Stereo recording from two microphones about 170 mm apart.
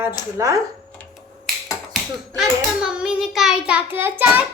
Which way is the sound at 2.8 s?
5° right (ahead or behind).